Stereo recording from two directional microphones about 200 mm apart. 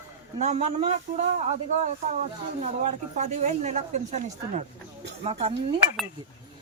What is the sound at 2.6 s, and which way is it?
Speech, 35° right (ahead or behind).